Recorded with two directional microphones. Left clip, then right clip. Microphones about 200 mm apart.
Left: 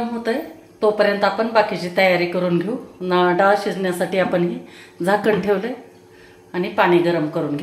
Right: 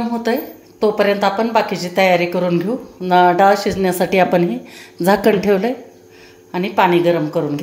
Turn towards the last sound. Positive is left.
turn(degrees=-25)  # may be behind; listen again after turning